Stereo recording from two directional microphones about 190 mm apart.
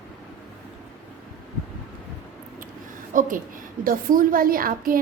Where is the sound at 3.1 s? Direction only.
45° right (ahead or behind).